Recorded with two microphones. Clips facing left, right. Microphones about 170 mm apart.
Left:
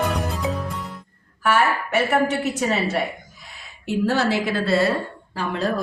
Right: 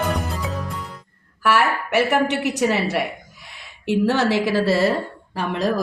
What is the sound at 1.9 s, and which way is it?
A woman's voice, 75° right (ahead or behind).